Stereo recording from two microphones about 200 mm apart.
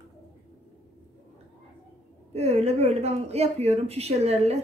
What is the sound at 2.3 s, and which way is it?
Speech, 30° right (ahead or behind).